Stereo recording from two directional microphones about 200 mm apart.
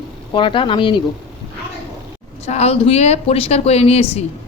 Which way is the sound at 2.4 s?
30° left (ahead or behind).